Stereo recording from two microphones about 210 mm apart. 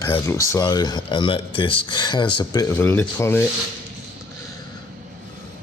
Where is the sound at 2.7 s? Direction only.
10° left (ahead or behind).